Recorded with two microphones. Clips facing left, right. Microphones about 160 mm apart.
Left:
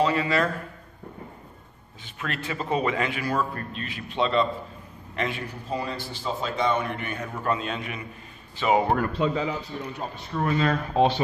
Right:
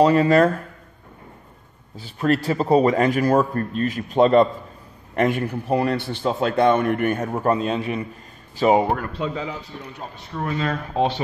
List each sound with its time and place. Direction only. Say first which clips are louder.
0.0 s a man's voice: right 8 dB; 40° right (ahead or behind)
2.0 s a man's voice: right 13 dB; 35° right (ahead or behind)
10.4 s speech: left 1 dB; 25° right (ahead or behind)